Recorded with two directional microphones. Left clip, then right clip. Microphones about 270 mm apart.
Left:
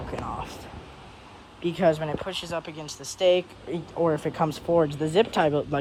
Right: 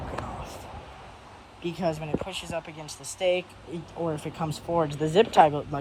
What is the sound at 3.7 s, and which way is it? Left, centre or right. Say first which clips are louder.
Speech: left 7 dB; centre.